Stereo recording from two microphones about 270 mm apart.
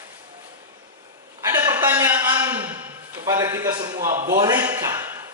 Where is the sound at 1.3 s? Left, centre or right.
Centre.